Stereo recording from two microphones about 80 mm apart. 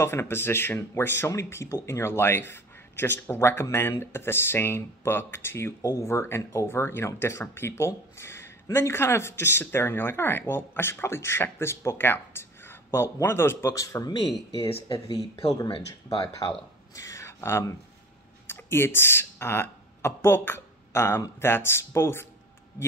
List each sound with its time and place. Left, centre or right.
0.0 s speech: left
15.1 s speech: left
16.4 s speech: left
16.9 s speech: left